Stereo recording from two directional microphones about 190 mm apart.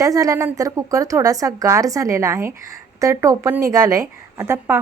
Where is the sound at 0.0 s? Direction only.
15° right (ahead or behind).